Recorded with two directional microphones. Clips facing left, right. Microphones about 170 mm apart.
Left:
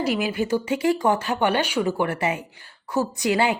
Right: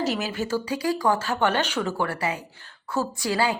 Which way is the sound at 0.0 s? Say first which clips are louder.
Left 3 dB; 10° left (ahead or behind).